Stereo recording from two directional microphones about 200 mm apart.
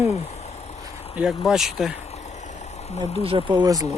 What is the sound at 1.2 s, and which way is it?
Speech, 5° right (ahead or behind).